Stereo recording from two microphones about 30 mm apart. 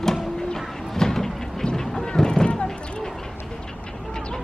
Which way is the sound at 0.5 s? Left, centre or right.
Centre.